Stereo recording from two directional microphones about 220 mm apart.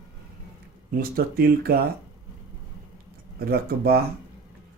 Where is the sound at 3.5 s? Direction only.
45° right (ahead or behind).